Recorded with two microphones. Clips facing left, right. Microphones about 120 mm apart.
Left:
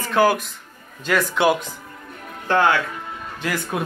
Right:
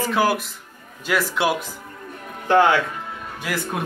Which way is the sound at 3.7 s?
Centre (ahead or behind).